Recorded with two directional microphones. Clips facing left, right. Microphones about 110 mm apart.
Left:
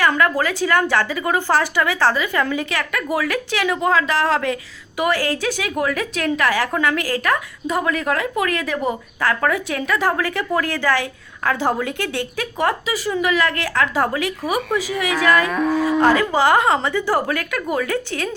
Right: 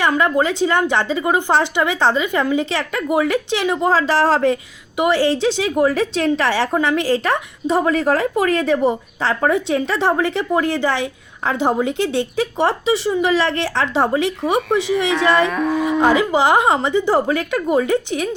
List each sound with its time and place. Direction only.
0.2 s a woman's voice: 25° right (ahead or behind)
15.4 s speech: centre (ahead or behind)
16.0 s a woman's voice: 15° right (ahead or behind)